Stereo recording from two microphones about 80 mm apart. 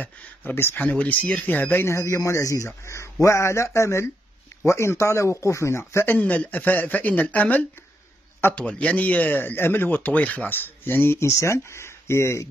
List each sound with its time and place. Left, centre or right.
0.0 s a man's voice: left
1.9 s a man's voice: left
6.1 s a man's voice: centre; by 12.4 s left